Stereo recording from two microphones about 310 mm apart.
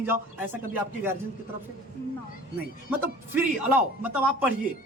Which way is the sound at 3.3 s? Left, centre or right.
Centre.